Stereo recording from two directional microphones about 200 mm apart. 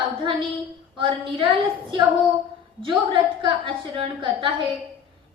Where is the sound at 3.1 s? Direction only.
25° right (ahead or behind).